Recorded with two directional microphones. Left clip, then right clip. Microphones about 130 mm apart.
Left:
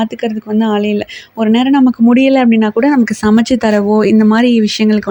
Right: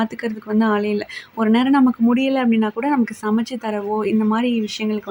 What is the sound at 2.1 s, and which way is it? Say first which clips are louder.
Speech: left 9 dB; 40° left (ahead or behind).